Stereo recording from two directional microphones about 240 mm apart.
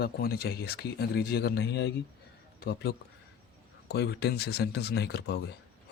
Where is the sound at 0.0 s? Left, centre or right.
Left.